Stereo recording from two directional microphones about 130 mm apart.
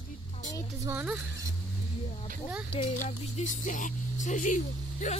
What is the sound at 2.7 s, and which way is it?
Speech, 50° left (ahead or behind).